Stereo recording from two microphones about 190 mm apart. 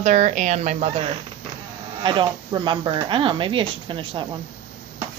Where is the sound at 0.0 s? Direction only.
40° right (ahead or behind).